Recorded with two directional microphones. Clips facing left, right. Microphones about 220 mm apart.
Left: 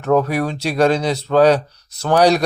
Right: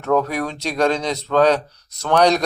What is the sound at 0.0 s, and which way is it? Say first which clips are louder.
Speech: left 3 dB; 10° left (ahead or behind).